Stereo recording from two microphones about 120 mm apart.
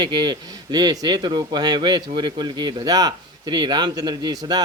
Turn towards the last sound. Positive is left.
turn(degrees=-35)  # may be behind; listen again after turning